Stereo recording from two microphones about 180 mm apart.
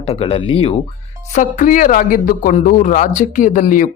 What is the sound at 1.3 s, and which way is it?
A woman's voice, 45° left (ahead or behind).